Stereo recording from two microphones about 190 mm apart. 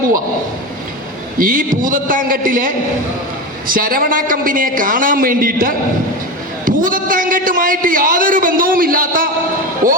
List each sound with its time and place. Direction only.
1.4 s a man's voice: 45° right (ahead or behind)
9.8 s basketball bounce: 45° right (ahead or behind)